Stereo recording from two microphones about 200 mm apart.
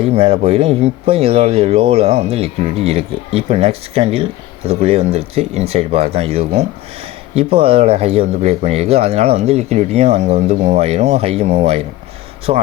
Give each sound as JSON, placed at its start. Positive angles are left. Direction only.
{"t": 0.0, "sound": "speech", "side_deg": -30}